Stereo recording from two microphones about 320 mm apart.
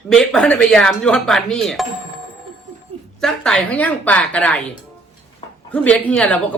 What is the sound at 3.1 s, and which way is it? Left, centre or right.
Speech, centre.